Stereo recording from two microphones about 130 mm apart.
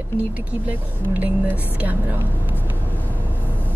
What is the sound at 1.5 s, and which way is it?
Speech, 15° left (ahead or behind).